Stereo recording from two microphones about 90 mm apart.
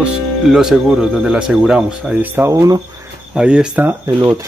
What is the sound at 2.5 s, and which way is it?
Speech, 40° right (ahead or behind).